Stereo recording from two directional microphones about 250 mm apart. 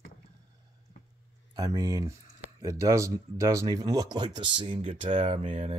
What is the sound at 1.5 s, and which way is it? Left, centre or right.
Speech, centre.